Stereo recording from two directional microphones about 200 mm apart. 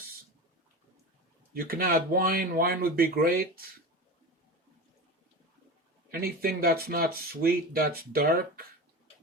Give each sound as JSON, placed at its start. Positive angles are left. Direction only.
{"t": 1.5, "sound": "speech", "side_deg": -45}
{"t": 6.1, "sound": "speech", "side_deg": -50}